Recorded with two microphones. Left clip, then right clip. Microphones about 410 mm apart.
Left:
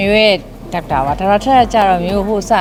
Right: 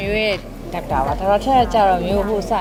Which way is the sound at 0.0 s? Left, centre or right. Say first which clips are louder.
Left 9 dB; left.